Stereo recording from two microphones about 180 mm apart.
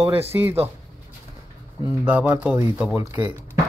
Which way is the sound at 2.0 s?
10° right (ahead or behind).